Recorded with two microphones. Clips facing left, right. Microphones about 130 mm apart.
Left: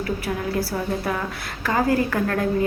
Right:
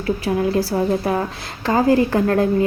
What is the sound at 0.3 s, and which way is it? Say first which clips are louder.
A woman's voice: right 9 dB; 30° right (ahead or behind).